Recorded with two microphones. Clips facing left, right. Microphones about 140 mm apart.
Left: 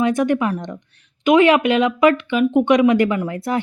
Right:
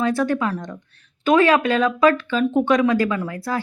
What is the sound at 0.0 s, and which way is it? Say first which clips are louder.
Speech: left 3 dB; 20° left (ahead or behind).